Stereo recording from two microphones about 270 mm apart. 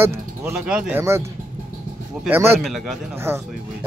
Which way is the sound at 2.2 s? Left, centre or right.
Centre.